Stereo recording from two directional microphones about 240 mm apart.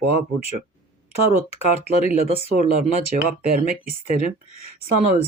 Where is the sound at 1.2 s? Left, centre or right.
Left.